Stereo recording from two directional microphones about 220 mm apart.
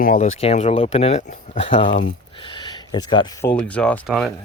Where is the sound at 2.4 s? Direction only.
20° left (ahead or behind).